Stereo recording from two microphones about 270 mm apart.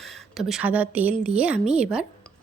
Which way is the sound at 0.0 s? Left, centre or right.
Centre.